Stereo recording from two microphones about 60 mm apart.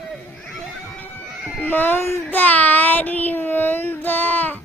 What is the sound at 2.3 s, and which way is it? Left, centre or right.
Child singing, left.